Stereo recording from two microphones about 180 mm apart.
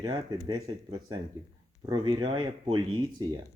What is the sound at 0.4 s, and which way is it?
Speech, 25° right (ahead or behind).